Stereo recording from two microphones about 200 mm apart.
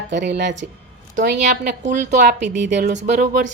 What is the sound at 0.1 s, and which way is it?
Speech, 60° right (ahead or behind).